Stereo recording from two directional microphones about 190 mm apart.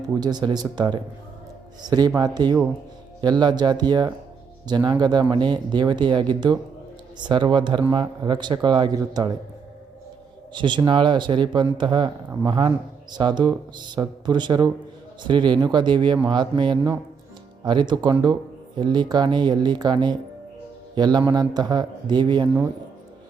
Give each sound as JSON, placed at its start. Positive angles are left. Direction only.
{"t": 0.2, "sound": "speech", "side_deg": -20}
{"t": 10.5, "sound": "speech", "side_deg": -25}